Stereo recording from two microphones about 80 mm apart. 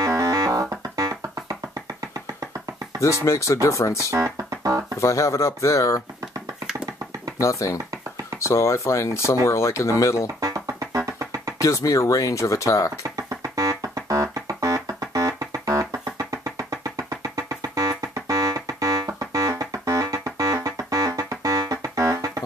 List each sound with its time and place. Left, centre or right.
0.0 s music: right
3.0 s speech: left
4.1 s music: right
4.9 s speech: left
7.3 s speech: left
10.4 s music: right
11.6 s speech: left
13.1 s music: right